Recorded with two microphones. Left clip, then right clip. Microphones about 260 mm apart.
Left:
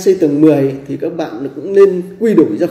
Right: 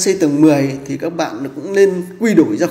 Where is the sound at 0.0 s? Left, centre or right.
Centre.